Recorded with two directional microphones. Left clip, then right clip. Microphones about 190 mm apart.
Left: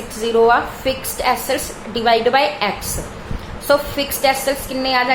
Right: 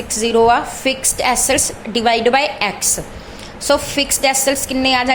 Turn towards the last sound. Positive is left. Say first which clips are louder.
# right 2 dB
turn(degrees=-35)  # may be behind; listen again after turning